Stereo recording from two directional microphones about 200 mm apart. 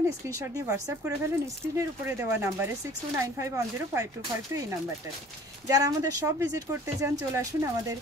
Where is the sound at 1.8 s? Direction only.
15° right (ahead or behind).